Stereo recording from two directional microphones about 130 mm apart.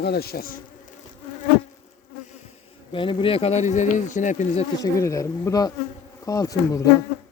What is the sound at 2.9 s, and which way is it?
Speech, 40° left (ahead or behind).